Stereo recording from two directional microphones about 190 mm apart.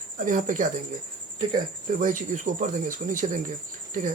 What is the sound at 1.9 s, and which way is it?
Speech, 45° right (ahead or behind).